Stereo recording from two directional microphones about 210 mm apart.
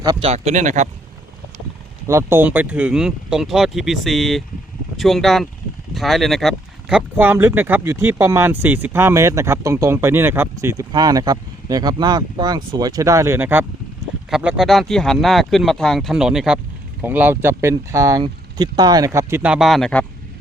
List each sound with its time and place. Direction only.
0.0 s speech: 20° right (ahead or behind)
2.0 s speech: 10° right (ahead or behind); by 20.1 s 5° left (ahead or behind)